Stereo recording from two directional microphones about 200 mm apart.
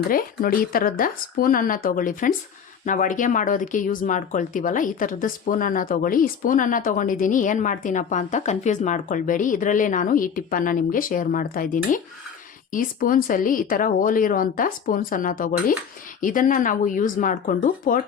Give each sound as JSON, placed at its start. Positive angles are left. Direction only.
{"t": 0.1, "sound": "speech", "side_deg": 45}